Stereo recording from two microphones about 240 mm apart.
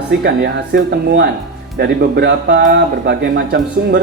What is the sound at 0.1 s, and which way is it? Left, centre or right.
Speech, right.